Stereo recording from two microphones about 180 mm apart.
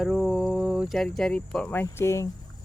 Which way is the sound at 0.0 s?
Centre (ahead or behind).